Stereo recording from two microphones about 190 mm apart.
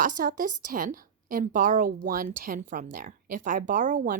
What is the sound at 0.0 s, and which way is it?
Speech, 45° right (ahead or behind).